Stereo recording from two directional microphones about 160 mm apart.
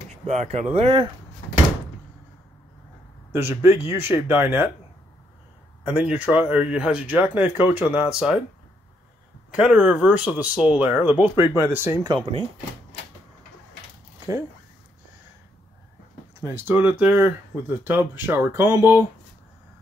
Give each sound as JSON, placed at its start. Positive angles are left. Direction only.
{"t": 0.3, "sound": "speech", "side_deg": -45}
{"t": 3.3, "sound": "speech", "side_deg": -15}
{"t": 5.9, "sound": "speech", "side_deg": -10}
{"t": 9.5, "sound": "speech", "side_deg": -5}
{"t": 16.3, "sound": "speech", "side_deg": -15}